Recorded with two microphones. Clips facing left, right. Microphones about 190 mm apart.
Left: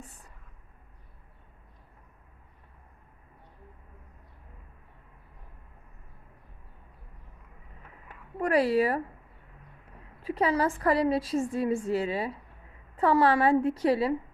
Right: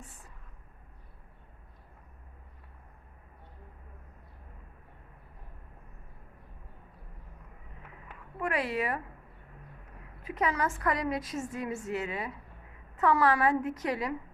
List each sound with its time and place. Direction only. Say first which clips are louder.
8.4 s a woman's voice: left 8 dB; 35° left (ahead or behind)
10.2 s a woman's voice: left 5 dB; 30° left (ahead or behind)